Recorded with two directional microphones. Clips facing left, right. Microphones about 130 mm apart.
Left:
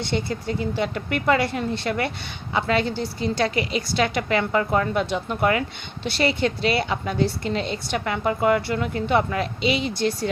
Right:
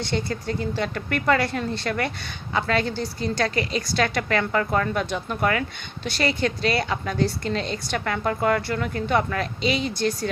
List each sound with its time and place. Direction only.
0.0 s a woman's voice: 20° left (ahead or behind)